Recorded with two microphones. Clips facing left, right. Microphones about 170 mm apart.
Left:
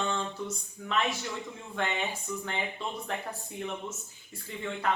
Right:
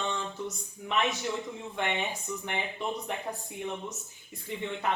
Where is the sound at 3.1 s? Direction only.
20° right (ahead or behind).